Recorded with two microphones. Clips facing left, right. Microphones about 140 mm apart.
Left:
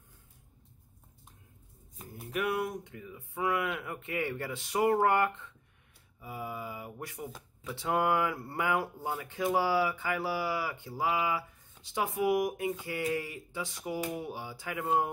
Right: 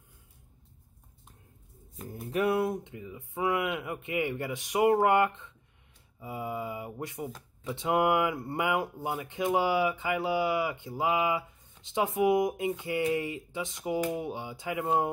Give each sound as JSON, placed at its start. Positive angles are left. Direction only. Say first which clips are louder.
{"t": 2.2, "sound": "speech", "louder": "right 5 dB", "side_deg": -30}